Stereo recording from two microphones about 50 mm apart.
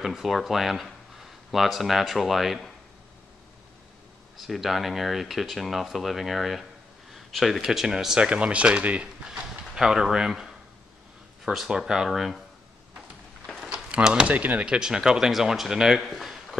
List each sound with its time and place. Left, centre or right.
0.0 s speech: centre
4.4 s speech: centre
7.6 s speech: centre
8.2 s speech: right
11.5 s speech: centre
13.5 s a sound: centre
14.0 s speech: centre
14.3 s speech: right
14.6 s speech: centre
16.0 s a sound: centre